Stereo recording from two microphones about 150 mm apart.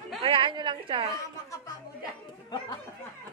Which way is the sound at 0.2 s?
35° right (ahead or behind).